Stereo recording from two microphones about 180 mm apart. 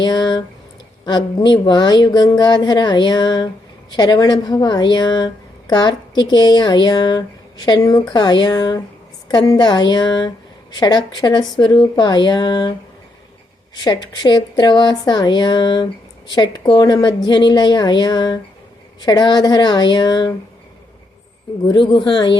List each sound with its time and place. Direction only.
0.0 s a woman's voice: 25° left (ahead or behind)
13.8 s a woman's voice: 25° left (ahead or behind)
21.7 s a woman's voice: 25° left (ahead or behind)